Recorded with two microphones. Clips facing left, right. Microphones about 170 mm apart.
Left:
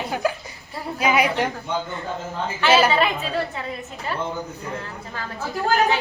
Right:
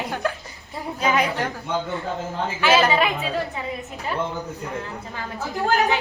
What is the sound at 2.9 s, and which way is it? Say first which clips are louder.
Speech: even; 10° right (ahead or behind).